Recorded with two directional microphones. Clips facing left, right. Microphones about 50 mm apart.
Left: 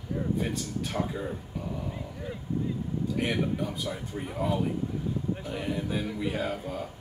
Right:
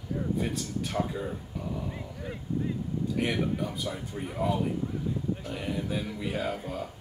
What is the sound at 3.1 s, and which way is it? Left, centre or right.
Speech, centre.